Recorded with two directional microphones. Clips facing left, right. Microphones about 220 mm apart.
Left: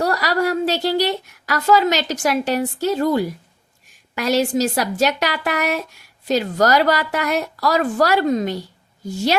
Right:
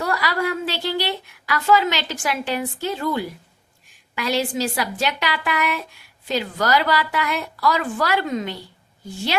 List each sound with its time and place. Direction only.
0.0 s a woman's voice: 40° left (ahead or behind)